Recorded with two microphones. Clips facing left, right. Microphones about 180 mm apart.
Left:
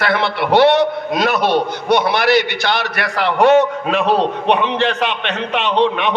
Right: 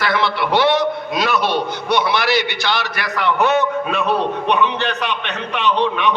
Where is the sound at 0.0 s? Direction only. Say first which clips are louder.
Left 1 dB; 60° left (ahead or behind).